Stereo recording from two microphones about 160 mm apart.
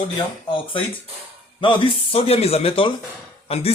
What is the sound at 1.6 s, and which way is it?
A man's voice, 30° left (ahead or behind).